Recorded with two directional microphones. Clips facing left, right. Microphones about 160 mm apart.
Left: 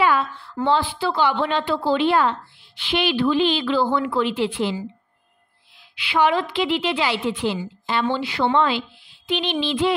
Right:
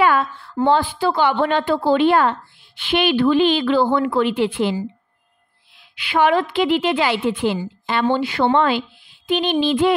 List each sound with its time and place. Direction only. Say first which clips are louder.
0.0 s a sound: right 3 dB; 50° right (ahead or behind)
0.7 s a woman's voice: right 3 dB; 45° right (ahead or behind)
5.9 s a woman's voice: right 3 dB; 50° right (ahead or behind)